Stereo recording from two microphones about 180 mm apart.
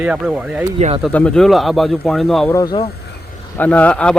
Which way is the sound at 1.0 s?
5° left (ahead or behind).